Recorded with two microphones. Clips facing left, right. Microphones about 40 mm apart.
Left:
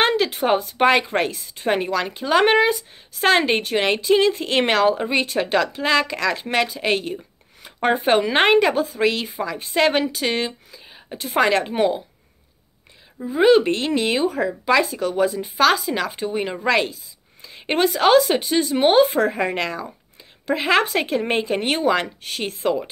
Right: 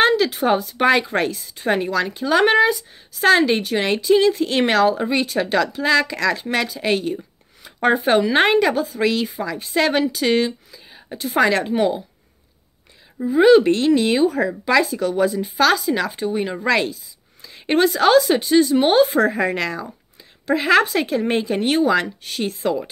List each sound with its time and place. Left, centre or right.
0.0 s speech: left
13.4 s speech: left